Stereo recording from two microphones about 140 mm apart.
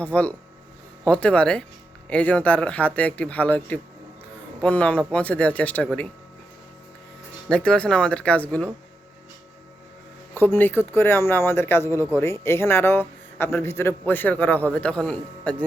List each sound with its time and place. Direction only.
0.0 s speech: 10° left (ahead or behind)
7.5 s speech: 5° left (ahead or behind)
10.3 s speech: 15° left (ahead or behind)